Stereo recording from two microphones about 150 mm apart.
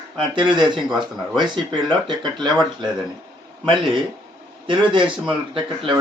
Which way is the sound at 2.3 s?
5° left (ahead or behind).